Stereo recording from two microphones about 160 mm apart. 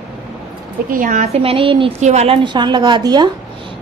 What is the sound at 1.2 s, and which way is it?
Speech, 40° right (ahead or behind).